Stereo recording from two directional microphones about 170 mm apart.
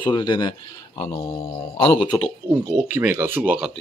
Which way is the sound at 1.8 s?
30° left (ahead or behind).